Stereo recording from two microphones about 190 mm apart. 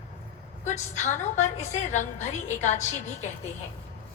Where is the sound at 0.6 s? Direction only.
40° left (ahead or behind).